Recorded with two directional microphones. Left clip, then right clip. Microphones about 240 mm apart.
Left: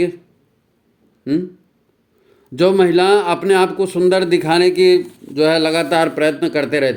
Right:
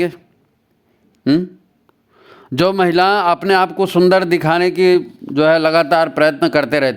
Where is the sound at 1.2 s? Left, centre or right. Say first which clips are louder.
Right 4 dB; right.